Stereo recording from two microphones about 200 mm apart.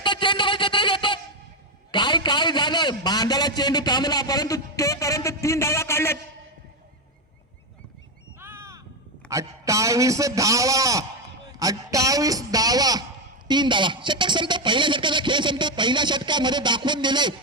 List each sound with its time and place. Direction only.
0.0 s a sound: 25° left (ahead or behind)
8.4 s crow: 10° right (ahead or behind)
9.3 s a man's voice: 15° right (ahead or behind)